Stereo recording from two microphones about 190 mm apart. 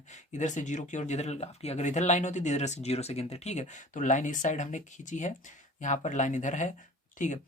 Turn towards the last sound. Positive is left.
turn(degrees=40)  # may be behind; listen again after turning